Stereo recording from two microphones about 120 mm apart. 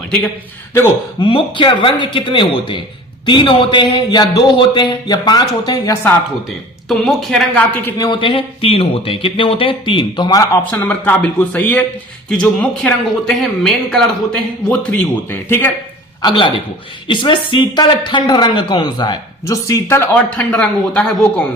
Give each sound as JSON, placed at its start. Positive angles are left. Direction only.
{"t": 1.2, "sound": "speech", "side_deg": 40}
{"t": 5.9, "sound": "speech", "side_deg": 20}
{"t": 6.8, "sound": "speech", "side_deg": 0}
{"t": 7.9, "sound": "speech", "side_deg": 30}
{"t": 8.2, "sound": "speech", "side_deg": 45}
{"t": 10.7, "sound": "speech", "side_deg": 15}
{"t": 16.2, "sound": "speech", "side_deg": 45}
{"t": 20.1, "sound": "speech", "side_deg": 10}